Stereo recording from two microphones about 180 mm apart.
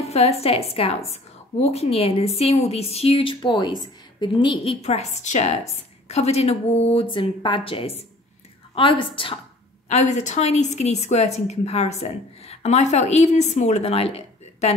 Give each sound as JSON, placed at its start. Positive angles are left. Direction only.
{"t": 0.0, "sound": "a woman's voice", "side_deg": 35}
{"t": 9.8, "sound": "a woman's voice", "side_deg": 40}